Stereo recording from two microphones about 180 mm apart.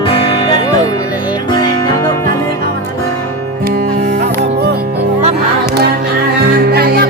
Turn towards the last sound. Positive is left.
turn(degrees=-60)  # may be behind; listen again after turning